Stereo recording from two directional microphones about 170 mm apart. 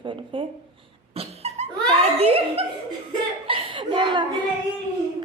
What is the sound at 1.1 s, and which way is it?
Giggle, 35° right (ahead or behind).